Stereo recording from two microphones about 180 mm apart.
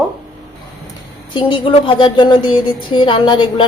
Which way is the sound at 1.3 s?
25° left (ahead or behind).